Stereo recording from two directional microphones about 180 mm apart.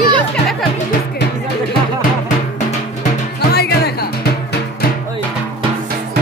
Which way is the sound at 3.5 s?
60° left (ahead or behind).